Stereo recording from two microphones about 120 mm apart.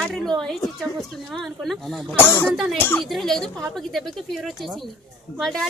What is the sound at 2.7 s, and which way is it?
Speech, 15° left (ahead or behind).